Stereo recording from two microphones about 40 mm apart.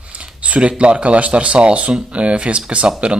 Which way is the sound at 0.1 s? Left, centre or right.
Right.